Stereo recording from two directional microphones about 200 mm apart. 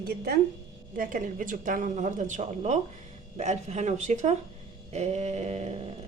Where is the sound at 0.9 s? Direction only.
40° right (ahead or behind).